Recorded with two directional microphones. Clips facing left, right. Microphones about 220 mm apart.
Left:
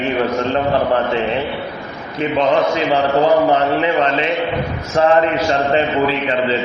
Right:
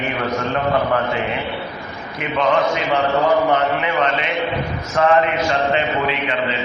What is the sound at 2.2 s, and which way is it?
A man's voice, 35° left (ahead or behind).